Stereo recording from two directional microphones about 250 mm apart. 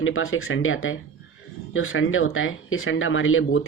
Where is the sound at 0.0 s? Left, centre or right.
Left.